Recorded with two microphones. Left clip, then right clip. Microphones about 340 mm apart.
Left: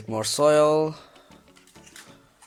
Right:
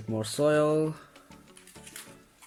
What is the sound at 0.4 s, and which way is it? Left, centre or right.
Speech, centre.